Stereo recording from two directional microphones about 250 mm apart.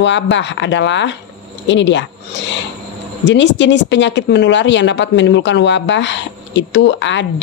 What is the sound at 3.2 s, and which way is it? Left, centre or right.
Speech, left.